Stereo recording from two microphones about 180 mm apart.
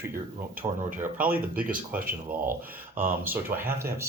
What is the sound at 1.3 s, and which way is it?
Speech, 10° right (ahead or behind).